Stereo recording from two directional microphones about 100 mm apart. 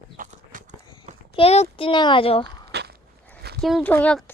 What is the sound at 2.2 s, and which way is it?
Speech, 70° left (ahead or behind).